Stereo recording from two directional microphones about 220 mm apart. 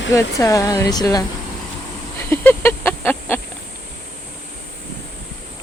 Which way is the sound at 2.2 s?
10° left (ahead or behind).